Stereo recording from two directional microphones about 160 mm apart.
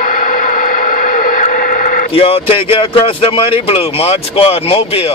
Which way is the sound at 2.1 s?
35° left (ahead or behind).